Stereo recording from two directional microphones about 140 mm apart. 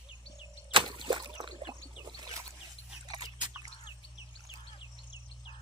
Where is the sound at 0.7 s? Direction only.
35° right (ahead or behind).